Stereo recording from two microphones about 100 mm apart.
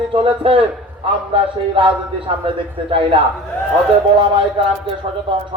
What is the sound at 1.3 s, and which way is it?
A man's voice, 60° right (ahead or behind).